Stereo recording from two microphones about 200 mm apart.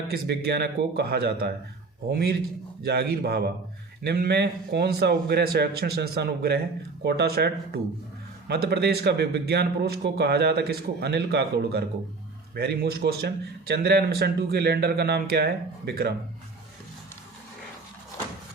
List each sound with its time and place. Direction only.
0.1 s a man's voice: 55° right (ahead or behind)